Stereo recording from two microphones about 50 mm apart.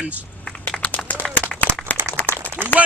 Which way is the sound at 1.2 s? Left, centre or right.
Centre.